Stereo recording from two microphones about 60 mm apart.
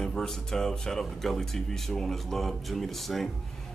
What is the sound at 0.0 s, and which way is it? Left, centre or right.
Speech, centre.